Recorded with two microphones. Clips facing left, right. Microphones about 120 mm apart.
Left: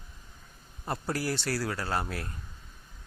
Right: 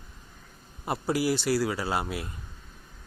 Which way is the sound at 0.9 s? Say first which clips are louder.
Right 5 dB; 5° right (ahead or behind).